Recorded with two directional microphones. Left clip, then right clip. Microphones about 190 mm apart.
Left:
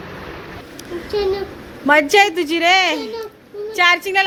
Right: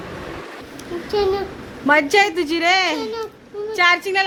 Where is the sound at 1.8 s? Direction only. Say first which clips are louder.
Left 2 dB; 10° left (ahead or behind).